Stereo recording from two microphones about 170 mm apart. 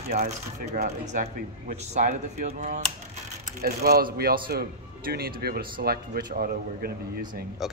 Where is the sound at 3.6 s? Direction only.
65° right (ahead or behind).